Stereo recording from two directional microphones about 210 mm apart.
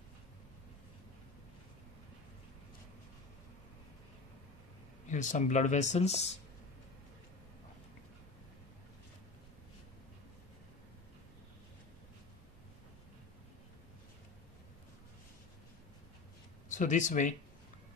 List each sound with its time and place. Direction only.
5.0 s speech: 35° left (ahead or behind)
16.6 s speech: 35° left (ahead or behind)